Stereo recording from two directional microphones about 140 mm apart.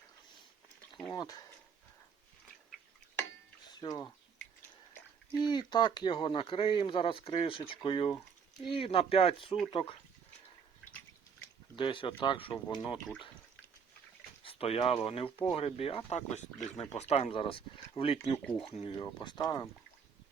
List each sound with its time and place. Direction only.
1.1 s speech: 30° left (ahead or behind)
3.7 s speech: 30° left (ahead or behind)
5.4 s speech: 30° left (ahead or behind)
11.8 s speech: 35° left (ahead or behind)
14.4 s speech: 45° left (ahead or behind)
16.1 s speech: 55° left (ahead or behind); by 17.6 s 40° left (ahead or behind)
18.0 s speech: 20° left (ahead or behind)
18.6 s speech: 45° left (ahead or behind); by 19.7 s 30° left (ahead or behind)